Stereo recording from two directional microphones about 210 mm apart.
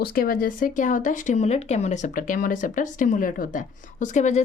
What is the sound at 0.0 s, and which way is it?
A woman's voice, 45° left (ahead or behind).